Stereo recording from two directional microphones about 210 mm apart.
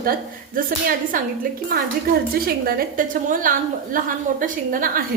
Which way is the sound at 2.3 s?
45° right (ahead or behind).